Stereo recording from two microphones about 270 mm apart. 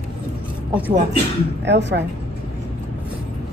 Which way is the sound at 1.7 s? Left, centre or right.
Right.